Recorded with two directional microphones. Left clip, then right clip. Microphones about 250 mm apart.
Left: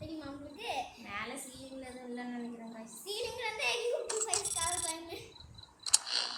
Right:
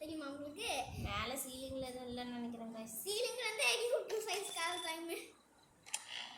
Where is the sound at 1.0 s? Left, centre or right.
Centre.